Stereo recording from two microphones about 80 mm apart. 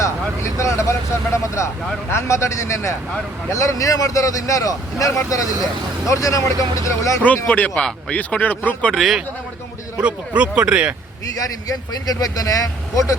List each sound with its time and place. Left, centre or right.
0.0 s speech: left
7.4 s speech: centre
7.7 s speech: centre
8.1 s speech: left
9.0 s a man's voice: centre
10.0 s speech: centre
11.3 s speech: left